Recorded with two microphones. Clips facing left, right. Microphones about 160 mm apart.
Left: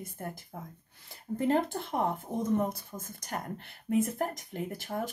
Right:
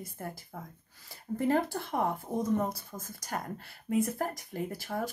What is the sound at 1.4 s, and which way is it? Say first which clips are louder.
Speech: even; 20° left (ahead or behind).